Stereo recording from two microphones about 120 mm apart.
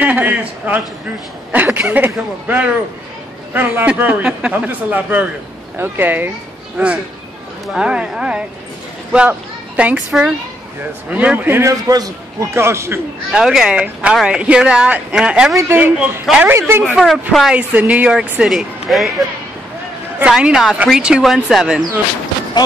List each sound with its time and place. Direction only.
0.0 s a woman's voice: 10° right (ahead or behind)
7.6 s a woman's voice: 5° right (ahead or behind)
11.9 s a man's voice: 30° right (ahead or behind)
12.5 s a man's voice: 20° right (ahead or behind)
13.3 s a woman's voice: 5° right (ahead or behind)
15.5 s a woman's voice: 15° right (ahead or behind)
16.9 s speech: centre (ahead or behind)
17.6 s a woman's voice: 15° right (ahead or behind)